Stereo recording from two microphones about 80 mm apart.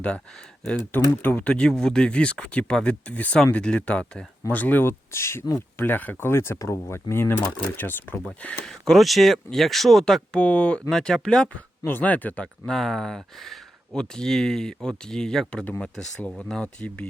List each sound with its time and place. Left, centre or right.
0.9 s speech: left
4.4 s speech: left
8.6 s speech: centre
10.4 s speech: centre
11.9 s speech: left
12.6 s speech: centre